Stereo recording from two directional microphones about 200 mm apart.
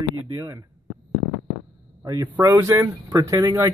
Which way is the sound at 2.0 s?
20° right (ahead or behind).